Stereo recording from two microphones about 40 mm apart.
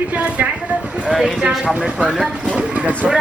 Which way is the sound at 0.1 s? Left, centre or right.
Right.